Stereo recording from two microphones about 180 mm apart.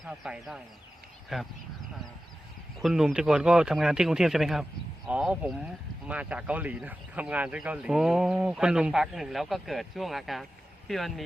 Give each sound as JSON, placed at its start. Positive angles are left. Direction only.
{"t": 0.0, "sound": "speech", "side_deg": -5}
{"t": 2.8, "sound": "a man's voice", "side_deg": 0}